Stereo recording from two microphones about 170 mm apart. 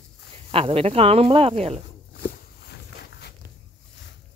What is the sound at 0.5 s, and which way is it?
Speech, 35° right (ahead or behind).